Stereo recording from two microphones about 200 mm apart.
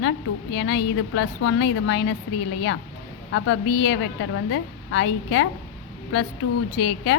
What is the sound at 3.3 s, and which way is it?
A woman's voice, 65° left (ahead or behind).